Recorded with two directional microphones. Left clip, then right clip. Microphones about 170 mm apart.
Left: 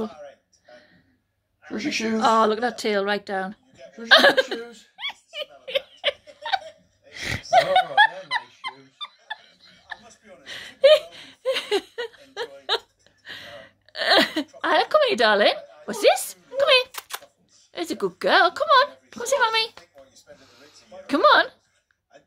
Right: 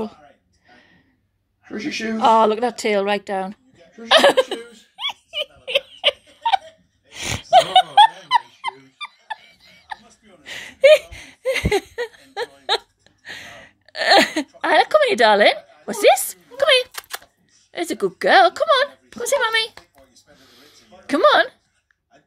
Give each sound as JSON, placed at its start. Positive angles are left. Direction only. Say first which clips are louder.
{"t": 2.1, "sound": "a woman's voice", "louder": "right 5 dB", "side_deg": -10}
{"t": 4.1, "sound": "giggle", "louder": "right 2 dB", "side_deg": -10}
{"t": 5.9, "sound": "laughter", "louder": "right 6 dB", "side_deg": -20}
{"t": 7.1, "sound": "gasp", "louder": "right 5 dB", "side_deg": -20}
{"t": 8.2, "sound": "a sound", "louder": "right 9 dB", "side_deg": -20}
{"t": 17.7, "sound": "a woman's voice", "louder": "right 4 dB", "side_deg": -15}
{"t": 20.3, "sound": "a sound", "louder": "right 2 dB", "side_deg": -10}